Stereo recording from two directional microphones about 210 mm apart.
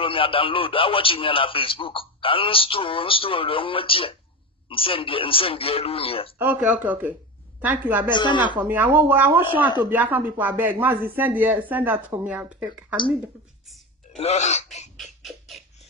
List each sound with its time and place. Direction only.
0.0 s a man's voice: 25° left (ahead or behind)
6.3 s speech: 10° right (ahead or behind)
8.1 s a man's voice: 20° left (ahead or behind)
8.5 s speech: 10° right (ahead or behind)
14.1 s speech: 30° left (ahead or behind)
15.0 s rodents: centre (ahead or behind)